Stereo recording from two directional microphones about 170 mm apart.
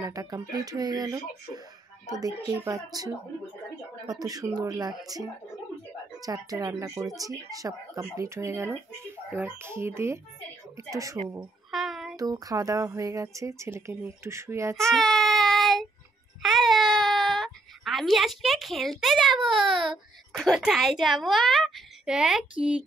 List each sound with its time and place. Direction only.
0.0 s speech: 20° right (ahead or behind)
11.7 s child singing: centre (ahead or behind)
12.2 s speech: 20° right (ahead or behind)
14.8 s child singing: centre (ahead or behind)
16.4 s baby cry: centre (ahead or behind)
19.4 s a child's voice: centre (ahead or behind)